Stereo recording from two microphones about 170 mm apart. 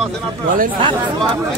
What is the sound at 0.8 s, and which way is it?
Speech, 30° right (ahead or behind).